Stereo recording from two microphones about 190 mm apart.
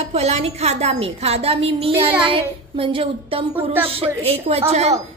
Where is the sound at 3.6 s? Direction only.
30° right (ahead or behind).